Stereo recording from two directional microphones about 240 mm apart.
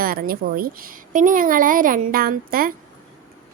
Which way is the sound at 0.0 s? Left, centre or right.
Right.